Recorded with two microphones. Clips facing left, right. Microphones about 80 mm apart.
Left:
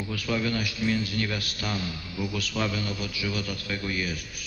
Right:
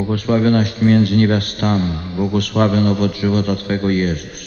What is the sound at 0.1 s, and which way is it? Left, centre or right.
A man's voice, right.